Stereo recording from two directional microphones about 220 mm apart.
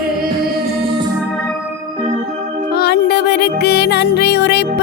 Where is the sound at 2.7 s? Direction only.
45° left (ahead or behind).